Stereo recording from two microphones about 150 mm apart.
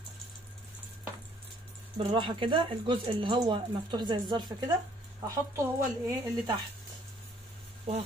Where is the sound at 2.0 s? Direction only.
35° right (ahead or behind).